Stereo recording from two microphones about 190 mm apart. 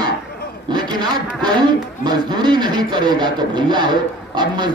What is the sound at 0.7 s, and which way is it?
A man's voice, 20° right (ahead or behind).